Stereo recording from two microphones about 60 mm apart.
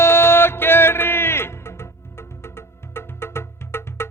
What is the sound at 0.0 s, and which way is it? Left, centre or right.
Music, left.